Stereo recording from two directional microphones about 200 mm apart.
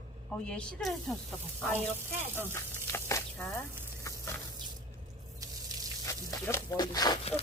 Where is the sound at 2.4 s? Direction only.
15° left (ahead or behind).